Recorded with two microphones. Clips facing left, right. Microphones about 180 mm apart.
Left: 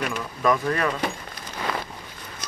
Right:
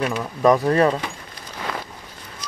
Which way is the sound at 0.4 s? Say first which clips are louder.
Right 7 dB; 35° right (ahead or behind).